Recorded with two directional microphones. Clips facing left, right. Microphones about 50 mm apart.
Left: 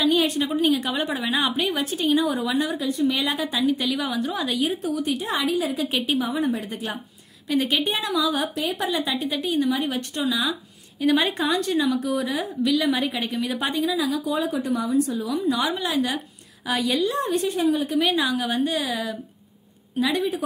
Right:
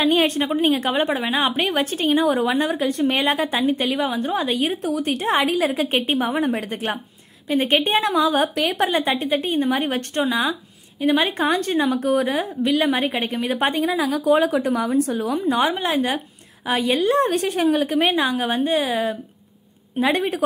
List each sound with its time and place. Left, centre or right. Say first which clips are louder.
0.0 s a woman's voice: right 2 dB; right
1.6 s a woman's voice: right 3 dB; right
2.8 s a woman's voice: right 3 dB; right
5.8 s a woman's voice: right 3 dB; right
6.2 s a woman's voice: right 3 dB; right
7.6 s a woman's voice: right 5 dB; right
8.5 s a woman's voice: right 5 dB; right
11.3 s a woman's voice: right 3 dB; right
13.9 s a woman's voice: right 6 dB; right
17.0 s a woman's voice: right 4 dB; right
17.9 s a woman's voice: right 2 dB; right
20.0 s a woman's voice: right 3 dB; right